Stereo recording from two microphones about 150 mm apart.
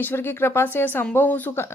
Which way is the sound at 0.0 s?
15° left (ahead or behind).